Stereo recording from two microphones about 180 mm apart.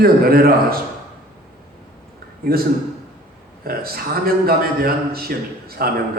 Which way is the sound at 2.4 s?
55° right (ahead or behind).